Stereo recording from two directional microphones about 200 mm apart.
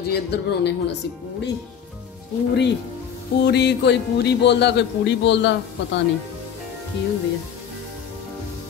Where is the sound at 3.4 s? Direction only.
55° left (ahead or behind).